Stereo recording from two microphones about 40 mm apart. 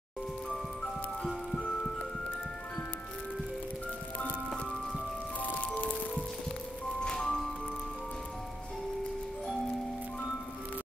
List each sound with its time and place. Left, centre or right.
0.5 s music: centre
5.4 s music: left
7.0 s music: centre